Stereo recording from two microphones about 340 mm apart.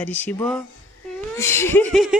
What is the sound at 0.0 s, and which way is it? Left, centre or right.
Speech, centre.